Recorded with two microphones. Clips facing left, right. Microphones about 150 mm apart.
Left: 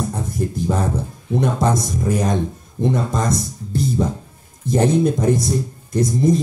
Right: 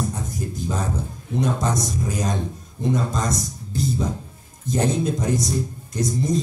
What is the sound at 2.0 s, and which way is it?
Speech, 55° left (ahead or behind).